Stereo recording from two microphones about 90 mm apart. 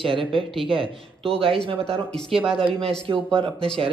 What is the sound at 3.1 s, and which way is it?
Speech, 60° right (ahead or behind).